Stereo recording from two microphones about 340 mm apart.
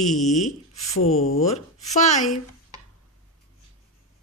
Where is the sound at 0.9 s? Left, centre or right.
Left.